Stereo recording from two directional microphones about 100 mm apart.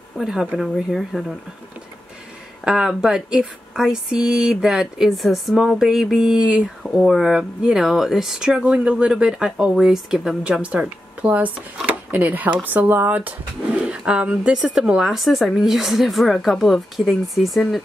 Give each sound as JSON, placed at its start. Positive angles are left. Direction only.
{"t": 0.2, "sound": "speech", "side_deg": -5}
{"t": 2.6, "sound": "speech", "side_deg": -5}